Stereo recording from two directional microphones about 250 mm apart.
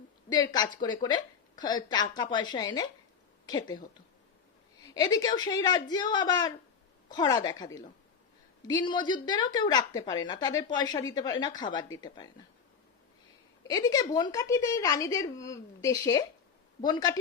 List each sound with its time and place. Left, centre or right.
0.3 s a woman's voice: centre
4.9 s a woman's voice: centre
13.7 s a woman's voice: centre